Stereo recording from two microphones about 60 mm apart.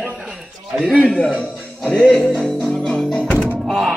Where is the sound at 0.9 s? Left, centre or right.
Centre.